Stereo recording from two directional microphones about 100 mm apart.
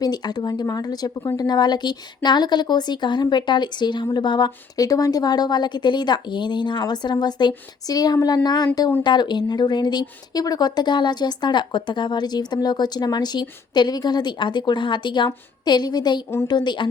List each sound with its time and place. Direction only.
0.0 s speech: 40° left (ahead or behind)